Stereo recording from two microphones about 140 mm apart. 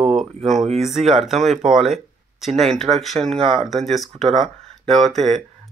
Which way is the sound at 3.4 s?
45° right (ahead or behind).